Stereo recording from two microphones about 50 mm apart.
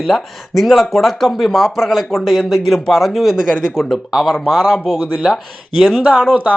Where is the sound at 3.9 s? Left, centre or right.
Centre.